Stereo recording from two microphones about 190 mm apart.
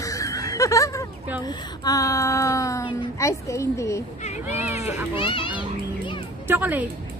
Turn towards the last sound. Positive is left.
turn(degrees=-10)  # may be behind; listen again after turning